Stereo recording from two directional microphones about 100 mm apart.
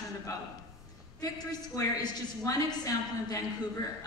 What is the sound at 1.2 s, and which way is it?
A woman's voice, 40° left (ahead or behind).